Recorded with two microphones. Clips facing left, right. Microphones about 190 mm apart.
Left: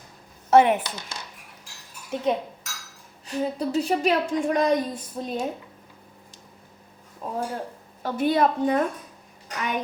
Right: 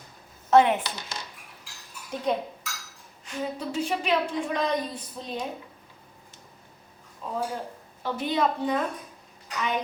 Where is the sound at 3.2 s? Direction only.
35° left (ahead or behind).